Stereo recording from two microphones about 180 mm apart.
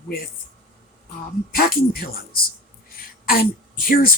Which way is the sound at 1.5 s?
55° left (ahead or behind).